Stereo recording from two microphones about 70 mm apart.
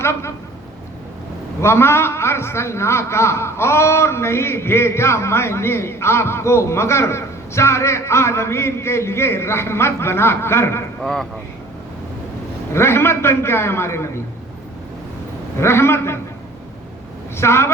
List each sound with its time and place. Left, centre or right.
0.0 s a man's voice: left
1.6 s a man's voice: left
11.0 s speech: centre
12.7 s a man's voice: left
15.5 s a man's voice: left
17.3 s a woman's voice: left